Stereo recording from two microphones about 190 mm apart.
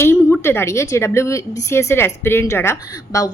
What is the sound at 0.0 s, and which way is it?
A woman's voice, 10° left (ahead or behind).